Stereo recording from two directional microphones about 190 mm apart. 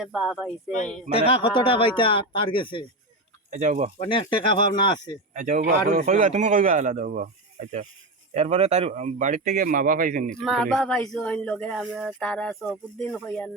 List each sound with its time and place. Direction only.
0.0 s speech: centre (ahead or behind)
1.1 s speech: 30° left (ahead or behind)
3.5 s speech: 40° right (ahead or behind)
3.9 s speech: 30° left (ahead or behind)
5.3 s speech: 45° right (ahead or behind)
10.4 s speech: centre (ahead or behind)